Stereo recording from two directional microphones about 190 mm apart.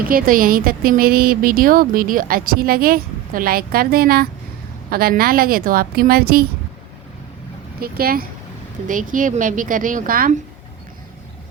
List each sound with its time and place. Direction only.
0.1 s speech: 50° right (ahead or behind)
7.8 s speech: 50° right (ahead or behind)